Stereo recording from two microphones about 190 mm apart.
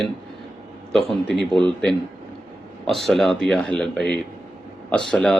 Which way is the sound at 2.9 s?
Centre (ahead or behind).